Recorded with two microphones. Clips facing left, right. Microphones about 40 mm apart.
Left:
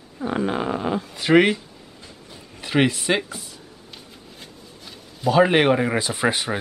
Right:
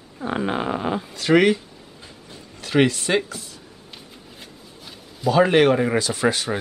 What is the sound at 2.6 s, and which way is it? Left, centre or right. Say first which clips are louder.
Speech: right 1 dB; centre.